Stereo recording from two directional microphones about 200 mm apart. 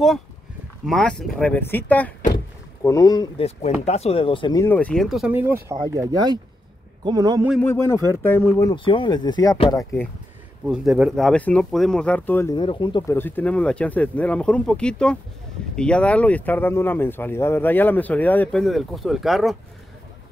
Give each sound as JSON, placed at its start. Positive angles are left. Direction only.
{"t": 0.8, "sound": "a man's voice", "side_deg": 5}
{"t": 7.6, "sound": "speech", "side_deg": 15}
{"t": 10.7, "sound": "speech", "side_deg": -5}
{"t": 12.5, "sound": "speech", "side_deg": 25}
{"t": 13.1, "sound": "speech", "side_deg": 10}